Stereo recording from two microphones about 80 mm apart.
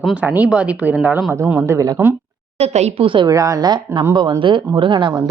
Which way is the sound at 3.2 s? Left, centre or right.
Right.